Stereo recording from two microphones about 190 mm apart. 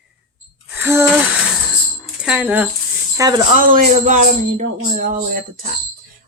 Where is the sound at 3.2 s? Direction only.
20° right (ahead or behind).